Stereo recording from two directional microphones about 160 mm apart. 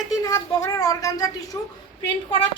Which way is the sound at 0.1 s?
20° left (ahead or behind).